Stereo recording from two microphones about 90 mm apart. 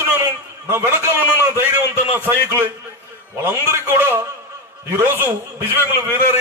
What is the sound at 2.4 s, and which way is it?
A man's voice, 25° right (ahead or behind).